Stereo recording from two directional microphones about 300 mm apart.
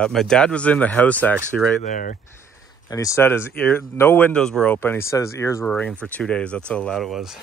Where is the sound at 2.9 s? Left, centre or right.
Centre.